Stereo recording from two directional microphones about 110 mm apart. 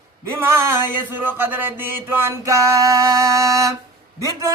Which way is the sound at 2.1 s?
25° right (ahead or behind).